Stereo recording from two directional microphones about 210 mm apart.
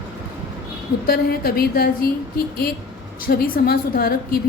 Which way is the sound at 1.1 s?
45° left (ahead or behind).